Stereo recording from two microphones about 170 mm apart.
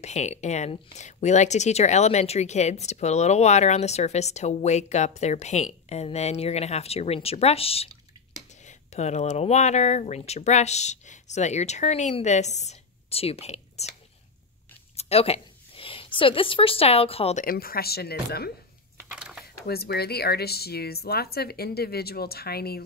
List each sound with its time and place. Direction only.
0.0 s speech: 40° left (ahead or behind)
15.0 s speech: 35° left (ahead or behind)
17.5 s speech: 60° left (ahead or behind)
19.0 s a sound: 5° right (ahead or behind)
19.4 s speech: 65° left (ahead or behind)